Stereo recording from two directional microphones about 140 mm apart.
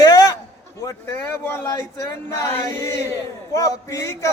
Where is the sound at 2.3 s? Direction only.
20° left (ahead or behind).